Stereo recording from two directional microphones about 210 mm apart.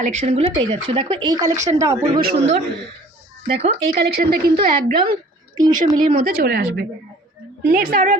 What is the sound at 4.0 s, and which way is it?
A woman's voice, 50° right (ahead or behind).